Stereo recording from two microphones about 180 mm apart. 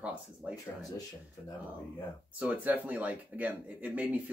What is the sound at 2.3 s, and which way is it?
Speech, 10° right (ahead or behind).